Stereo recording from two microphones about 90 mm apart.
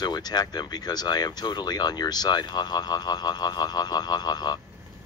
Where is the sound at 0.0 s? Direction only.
50° left (ahead or behind).